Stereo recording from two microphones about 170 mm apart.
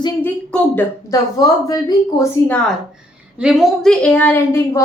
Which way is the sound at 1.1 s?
20° left (ahead or behind).